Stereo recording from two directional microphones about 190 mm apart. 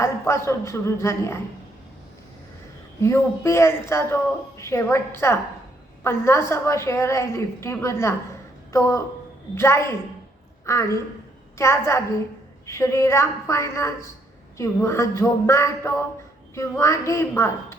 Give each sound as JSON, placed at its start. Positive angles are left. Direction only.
{"t": 0.0, "sound": "a woman's voice", "side_deg": 15}
{"t": 3.0, "sound": "a woman's voice", "side_deg": 15}